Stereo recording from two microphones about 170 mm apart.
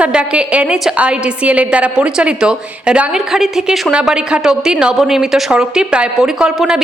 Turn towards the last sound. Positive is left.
turn(degrees=-5)  # may be behind; listen again after turning